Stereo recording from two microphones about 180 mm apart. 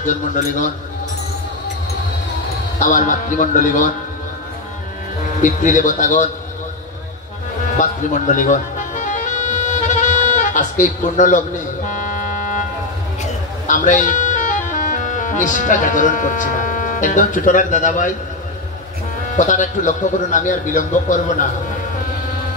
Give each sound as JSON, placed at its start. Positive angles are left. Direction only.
{"t": 0.0, "sound": "a man's voice", "side_deg": 45}
{"t": 2.8, "sound": "a man's voice", "side_deg": 45}
{"t": 5.4, "sound": "a man's voice", "side_deg": 45}
{"t": 7.8, "sound": "music", "side_deg": 45}
{"t": 19.3, "sound": "a man's voice", "side_deg": 45}